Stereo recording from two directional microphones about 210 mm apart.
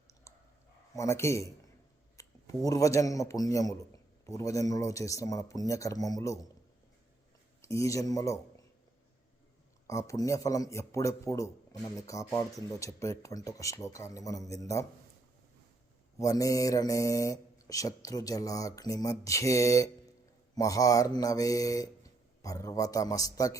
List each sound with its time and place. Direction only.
0.9 s speech: 15° left (ahead or behind)
7.6 s a man's voice: 15° left (ahead or behind)
9.8 s speech: 15° left (ahead or behind)
16.1 s speech: 15° left (ahead or behind)